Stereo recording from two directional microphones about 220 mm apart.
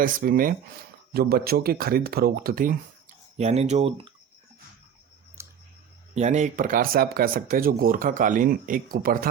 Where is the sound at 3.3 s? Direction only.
30° right (ahead or behind).